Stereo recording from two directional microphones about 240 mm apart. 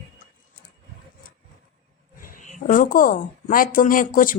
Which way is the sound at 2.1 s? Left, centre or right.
Left.